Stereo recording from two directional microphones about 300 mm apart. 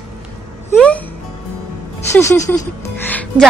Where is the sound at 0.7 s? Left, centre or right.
Centre.